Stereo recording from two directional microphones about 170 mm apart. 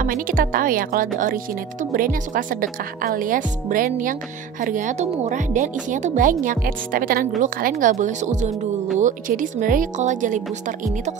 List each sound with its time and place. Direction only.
0.0 s speech: 55° right (ahead or behind)
7.7 s speech: 45° right (ahead or behind)